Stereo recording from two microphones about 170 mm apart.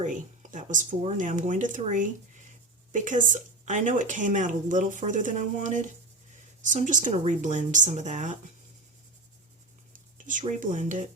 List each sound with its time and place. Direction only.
0.0 s speech: 50° right (ahead or behind)
10.6 s speech: 50° right (ahead or behind)